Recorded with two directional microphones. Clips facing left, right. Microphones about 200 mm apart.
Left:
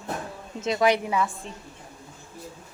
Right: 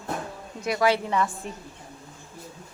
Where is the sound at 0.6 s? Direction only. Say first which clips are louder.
Left 1 dB; 20° left (ahead or behind).